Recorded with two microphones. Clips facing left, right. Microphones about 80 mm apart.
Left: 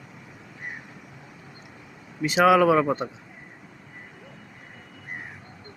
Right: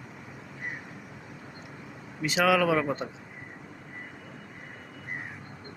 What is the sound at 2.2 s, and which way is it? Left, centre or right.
Speech, left.